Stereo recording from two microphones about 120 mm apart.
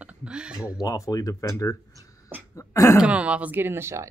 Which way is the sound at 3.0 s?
10° right (ahead or behind).